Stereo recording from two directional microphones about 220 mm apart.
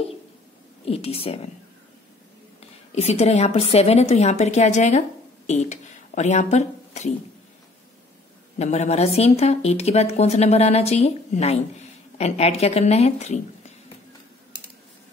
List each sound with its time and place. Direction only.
0.8 s speech: 25° left (ahead or behind)
2.9 s a woman's voice: 30° left (ahead or behind)
8.5 s speech: 30° left (ahead or behind)